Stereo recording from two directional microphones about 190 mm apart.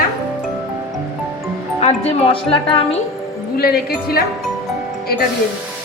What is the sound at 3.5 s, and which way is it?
Speech, 55° left (ahead or behind).